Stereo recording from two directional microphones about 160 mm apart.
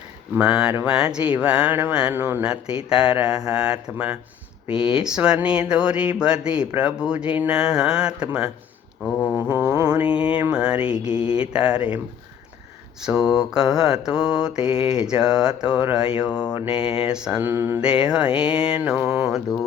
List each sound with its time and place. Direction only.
0.3 s speech: 5° right (ahead or behind)
9.0 s a sound: 10° left (ahead or behind)
9.5 s mantra: 10° right (ahead or behind)
9.7 s mantra: 20° right (ahead or behind)
10.0 s speech: 5° right (ahead or behind)
13.2 s speech: 5° right (ahead or behind)
16.6 s a sound: 35° left (ahead or behind)
17.1 s speech: 5° right (ahead or behind)